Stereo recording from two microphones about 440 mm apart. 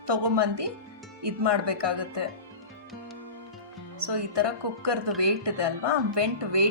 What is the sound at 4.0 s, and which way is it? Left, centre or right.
A woman's voice, right.